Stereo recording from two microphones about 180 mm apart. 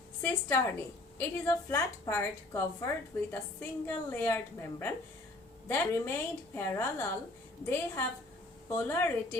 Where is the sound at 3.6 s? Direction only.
10° left (ahead or behind).